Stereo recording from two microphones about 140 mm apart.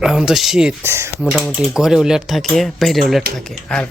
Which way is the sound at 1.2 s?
5° right (ahead or behind).